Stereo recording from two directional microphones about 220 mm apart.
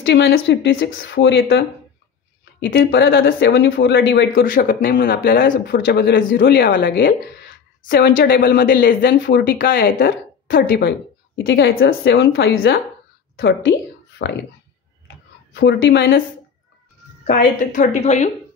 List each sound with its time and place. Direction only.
0.0 s speech: 55° left (ahead or behind)
2.6 s speech: 55° left (ahead or behind)
4.3 s speech: 40° left (ahead or behind); by 14.3 s 55° left (ahead or behind)
15.5 s speech: 55° left (ahead or behind)
17.6 s a woman's voice: 35° left (ahead or behind)